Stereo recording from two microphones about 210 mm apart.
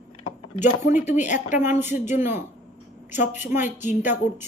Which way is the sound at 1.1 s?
35° left (ahead or behind).